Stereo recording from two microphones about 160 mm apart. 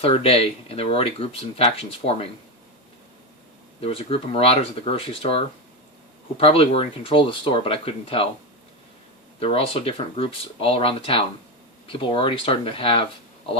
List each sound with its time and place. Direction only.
0.0 s speech: 35° left (ahead or behind)
3.8 s speech: 35° left (ahead or behind)
9.4 s speech: 40° left (ahead or behind)